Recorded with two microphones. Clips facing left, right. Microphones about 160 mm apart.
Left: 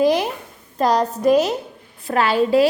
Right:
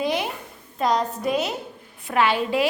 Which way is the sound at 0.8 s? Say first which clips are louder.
Left 4 dB; 40° left (ahead or behind).